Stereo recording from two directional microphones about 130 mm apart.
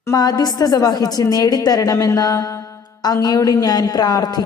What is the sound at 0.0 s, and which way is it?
A woman's voice, 25° left (ahead or behind).